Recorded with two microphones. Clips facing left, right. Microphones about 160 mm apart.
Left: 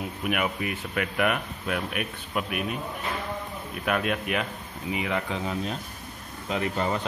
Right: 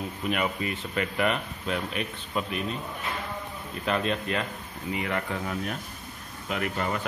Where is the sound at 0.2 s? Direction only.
10° left (ahead or behind).